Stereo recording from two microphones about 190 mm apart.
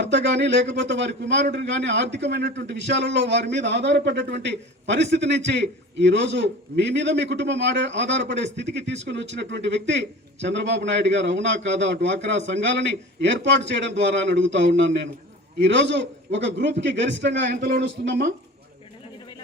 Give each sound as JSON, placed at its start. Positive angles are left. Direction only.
{"t": 0.0, "sound": "a man's voice", "side_deg": -70}